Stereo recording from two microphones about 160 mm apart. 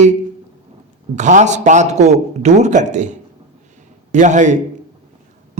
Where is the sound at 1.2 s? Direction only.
50° right (ahead or behind).